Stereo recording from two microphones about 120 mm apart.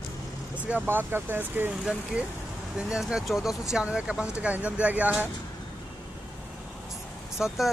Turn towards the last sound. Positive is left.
turn(degrees=0)  # may be behind; listen again after turning